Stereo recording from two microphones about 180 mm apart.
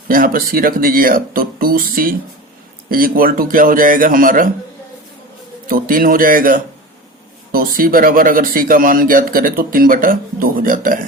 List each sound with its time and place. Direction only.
0.1 s a man's voice: 50° right (ahead or behind)
5.6 s a man's voice: 50° right (ahead or behind)